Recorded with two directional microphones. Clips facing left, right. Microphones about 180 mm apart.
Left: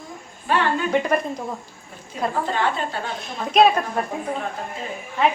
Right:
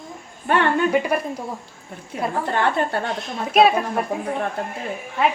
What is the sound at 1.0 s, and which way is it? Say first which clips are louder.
Speech: left 1 dB; 10° right (ahead or behind).